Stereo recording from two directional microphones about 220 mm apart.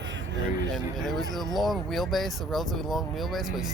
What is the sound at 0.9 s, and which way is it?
Speech, centre (ahead or behind).